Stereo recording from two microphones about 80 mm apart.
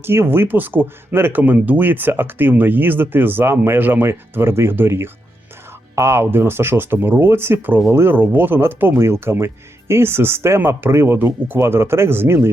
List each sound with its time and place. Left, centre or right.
0.0 s speech: right